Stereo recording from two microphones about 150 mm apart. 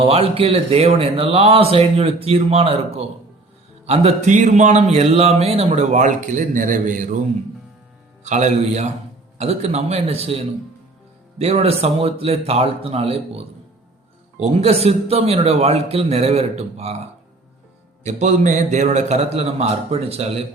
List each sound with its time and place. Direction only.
0.0 s a man's voice: 40° right (ahead or behind); by 7.2 s 55° right (ahead or behind)
8.2 s speech: 50° right (ahead or behind)
18.0 s speech: 50° right (ahead or behind)